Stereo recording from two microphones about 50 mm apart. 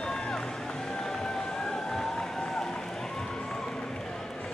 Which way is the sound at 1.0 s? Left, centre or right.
Centre.